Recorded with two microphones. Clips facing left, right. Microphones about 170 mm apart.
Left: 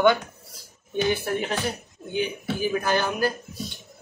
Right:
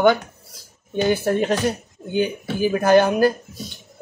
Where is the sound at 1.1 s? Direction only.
40° right (ahead or behind).